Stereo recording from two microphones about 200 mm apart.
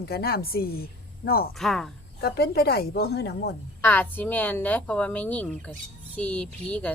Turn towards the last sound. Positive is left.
turn(degrees=5)  # may be behind; listen again after turning